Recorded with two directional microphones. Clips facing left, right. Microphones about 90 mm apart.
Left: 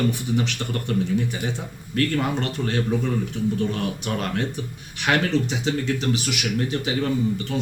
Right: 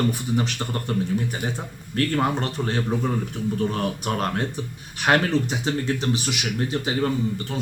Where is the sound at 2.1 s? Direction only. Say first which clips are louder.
Right 1 dB; 35° right (ahead or behind).